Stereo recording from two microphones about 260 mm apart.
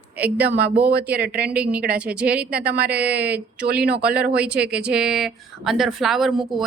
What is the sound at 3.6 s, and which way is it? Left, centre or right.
Speech, right.